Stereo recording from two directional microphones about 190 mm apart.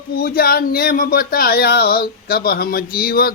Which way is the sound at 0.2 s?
50° left (ahead or behind).